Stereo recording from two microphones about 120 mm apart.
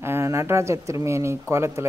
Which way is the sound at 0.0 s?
20° right (ahead or behind).